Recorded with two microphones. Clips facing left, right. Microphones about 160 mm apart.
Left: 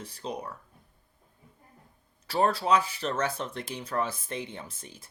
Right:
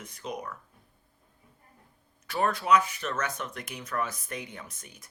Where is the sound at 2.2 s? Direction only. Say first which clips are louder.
Left 2 dB; 30° left (ahead or behind).